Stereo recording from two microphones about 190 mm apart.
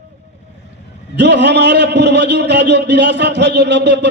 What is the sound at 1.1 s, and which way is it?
A man's voice, 65° right (ahead or behind).